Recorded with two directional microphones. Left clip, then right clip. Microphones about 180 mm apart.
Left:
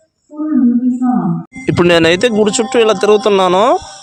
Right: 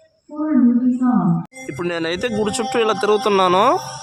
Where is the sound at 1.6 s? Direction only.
45° left (ahead or behind).